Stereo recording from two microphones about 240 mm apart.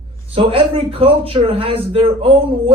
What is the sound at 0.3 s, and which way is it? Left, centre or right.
A man's voice, right.